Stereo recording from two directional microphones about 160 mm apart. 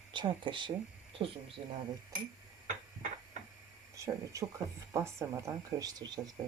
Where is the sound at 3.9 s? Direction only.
20° right (ahead or behind).